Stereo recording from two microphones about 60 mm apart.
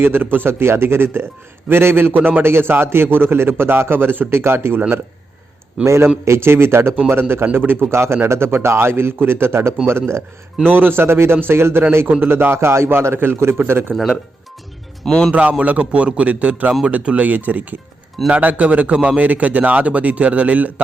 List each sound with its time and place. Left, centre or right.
0.0 s a man's voice: right
5.8 s a man's voice: right
15.0 s a man's voice: centre
15.3 s a man's voice: right